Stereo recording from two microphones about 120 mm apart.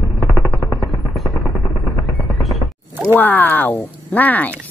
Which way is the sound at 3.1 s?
15° left (ahead or behind).